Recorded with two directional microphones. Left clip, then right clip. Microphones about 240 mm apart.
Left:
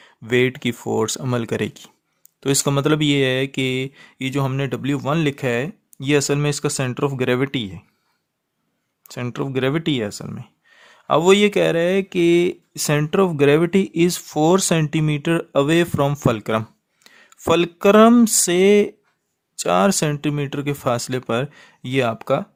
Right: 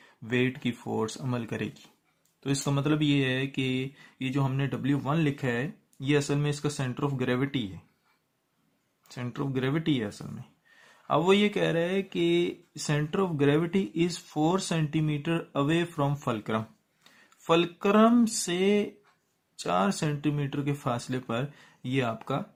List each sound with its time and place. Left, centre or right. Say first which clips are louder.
0.0 s speech: left 10 dB; left
9.0 s speech: left 9 dB; left